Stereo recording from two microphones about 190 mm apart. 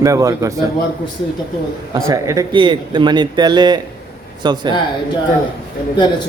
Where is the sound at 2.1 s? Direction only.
15° right (ahead or behind).